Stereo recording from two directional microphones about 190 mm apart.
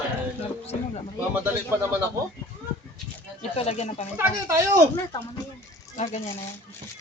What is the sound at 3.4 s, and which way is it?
Speech, 35° left (ahead or behind).